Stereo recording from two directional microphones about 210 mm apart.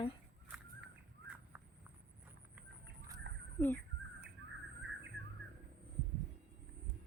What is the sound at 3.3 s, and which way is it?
Crow, 55° right (ahead or behind).